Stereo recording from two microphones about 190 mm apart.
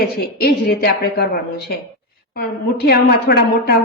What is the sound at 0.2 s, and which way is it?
A woman's voice, 55° left (ahead or behind).